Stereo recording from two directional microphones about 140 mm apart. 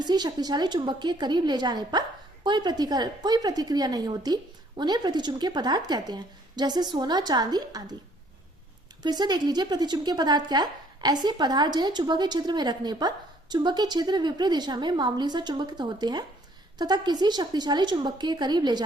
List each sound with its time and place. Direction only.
0.0 s a woman's voice: 30° right (ahead or behind)
9.0 s a woman's voice: 30° right (ahead or behind)